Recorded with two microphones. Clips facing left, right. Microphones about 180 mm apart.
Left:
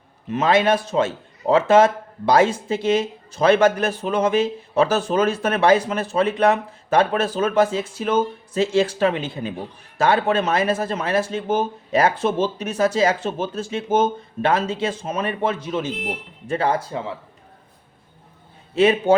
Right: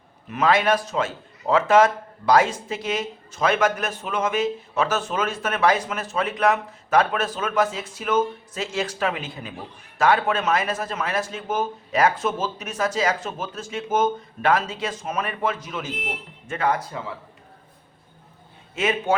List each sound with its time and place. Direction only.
0.3 s a man's voice: 25° left (ahead or behind)
18.7 s a man's voice: 35° left (ahead or behind)